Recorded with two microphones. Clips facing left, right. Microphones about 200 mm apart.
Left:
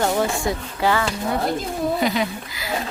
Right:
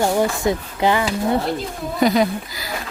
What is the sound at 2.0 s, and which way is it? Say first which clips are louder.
Speech: right 5 dB; 40° right (ahead or behind).